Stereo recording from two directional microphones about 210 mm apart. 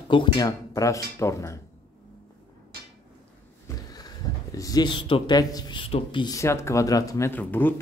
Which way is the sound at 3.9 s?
15° left (ahead or behind).